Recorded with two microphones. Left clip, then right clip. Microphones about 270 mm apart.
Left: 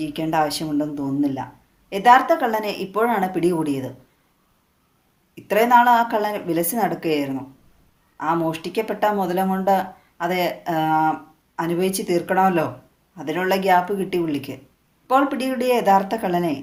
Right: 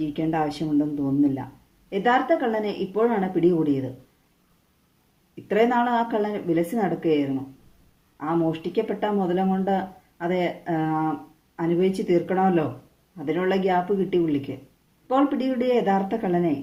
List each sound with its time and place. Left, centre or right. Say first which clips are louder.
0.0 s speech: left 4 dB; left
5.3 s speech: left 6 dB; left
8.5 s speech: left 2 dB; left